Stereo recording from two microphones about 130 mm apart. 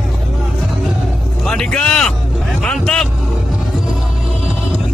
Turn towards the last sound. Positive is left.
turn(degrees=5)  # may be behind; listen again after turning